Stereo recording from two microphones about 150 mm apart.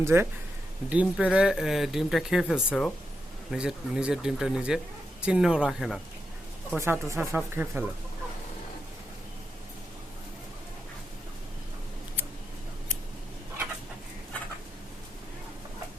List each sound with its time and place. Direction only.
0.0 s speech: 15° right (ahead or behind)
6.7 s speech: 15° right (ahead or behind)